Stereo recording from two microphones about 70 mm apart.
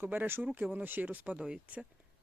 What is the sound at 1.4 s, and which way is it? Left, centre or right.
Speech, centre.